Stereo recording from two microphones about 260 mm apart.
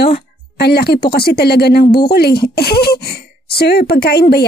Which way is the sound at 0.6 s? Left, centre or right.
Left.